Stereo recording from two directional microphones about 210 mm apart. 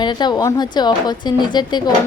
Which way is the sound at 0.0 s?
20° left (ahead or behind).